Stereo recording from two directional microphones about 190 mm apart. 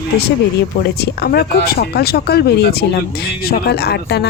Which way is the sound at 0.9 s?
55° left (ahead or behind).